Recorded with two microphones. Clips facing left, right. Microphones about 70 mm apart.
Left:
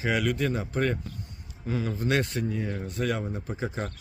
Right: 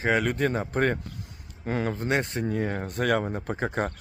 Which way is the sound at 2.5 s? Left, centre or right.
Right.